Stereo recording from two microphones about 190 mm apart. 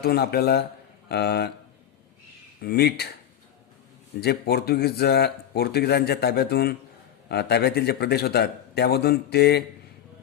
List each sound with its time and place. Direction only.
0.0 s a man's voice: 55° left (ahead or behind)
2.6 s a man's voice: 55° left (ahead or behind)
4.2 s a man's voice: 55° left (ahead or behind)